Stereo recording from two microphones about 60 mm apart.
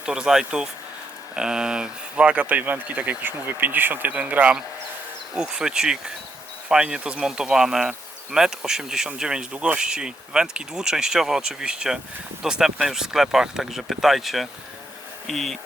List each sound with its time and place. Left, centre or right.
0.0 s bee: centre
1.4 s speech: centre
5.3 s bee: centre
12.4 s speech: centre